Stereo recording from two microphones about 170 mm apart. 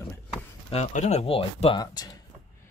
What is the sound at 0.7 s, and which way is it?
Speech, 40° left (ahead or behind).